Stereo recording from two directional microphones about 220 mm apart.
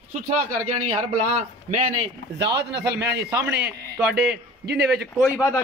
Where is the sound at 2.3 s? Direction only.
50° right (ahead or behind).